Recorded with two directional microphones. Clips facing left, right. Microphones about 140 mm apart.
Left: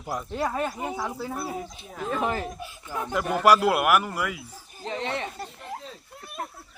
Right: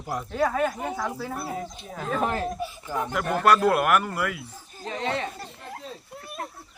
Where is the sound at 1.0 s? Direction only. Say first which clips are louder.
Right 1 dB; 20° left (ahead or behind).